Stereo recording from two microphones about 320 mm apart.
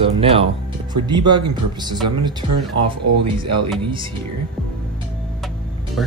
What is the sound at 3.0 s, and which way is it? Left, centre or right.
Speech, right.